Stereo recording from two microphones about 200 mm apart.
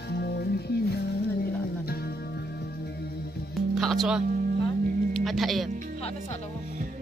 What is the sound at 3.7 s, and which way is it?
Speech, centre (ahead or behind).